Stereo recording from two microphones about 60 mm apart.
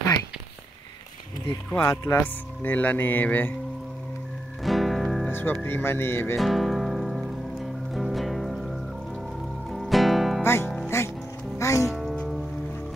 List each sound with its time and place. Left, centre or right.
1.8 s speech: left
2.2 s speech: left
4.6 s music: centre
5.3 s speech: left
6.3 s music: centre
10.4 s music: left